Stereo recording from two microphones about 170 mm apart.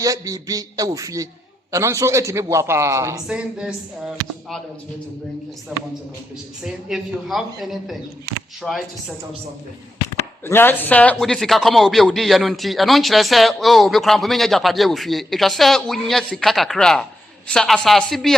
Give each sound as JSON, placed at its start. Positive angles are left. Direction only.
{"t": 0.0, "sound": "a man's voice", "side_deg": -20}
{"t": 3.2, "sound": "a man's voice", "side_deg": -5}
{"t": 5.7, "sound": "a man's voice", "side_deg": -5}
{"t": 10.4, "sound": "a man's voice", "side_deg": 10}